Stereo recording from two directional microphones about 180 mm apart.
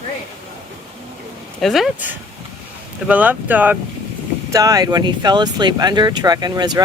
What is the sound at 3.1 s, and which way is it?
Speech, 10° right (ahead or behind).